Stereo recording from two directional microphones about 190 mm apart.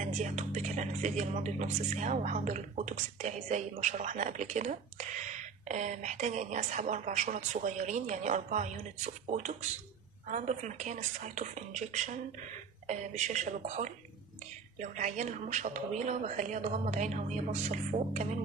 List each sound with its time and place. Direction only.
0.0 s speech: 40° right (ahead or behind)